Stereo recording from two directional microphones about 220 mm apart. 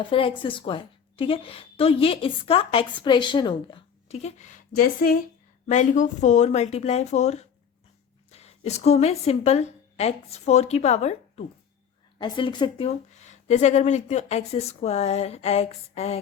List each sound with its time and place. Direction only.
0.1 s a woman's voice: 25° left (ahead or behind)